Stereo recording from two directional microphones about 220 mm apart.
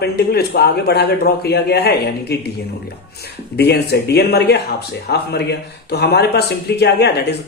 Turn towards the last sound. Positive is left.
turn(degrees=50)  # may be behind; listen again after turning